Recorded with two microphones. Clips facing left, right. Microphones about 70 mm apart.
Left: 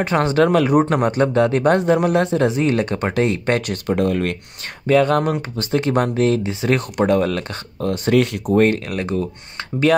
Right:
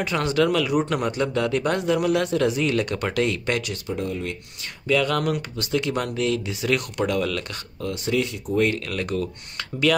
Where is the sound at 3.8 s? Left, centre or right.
Left.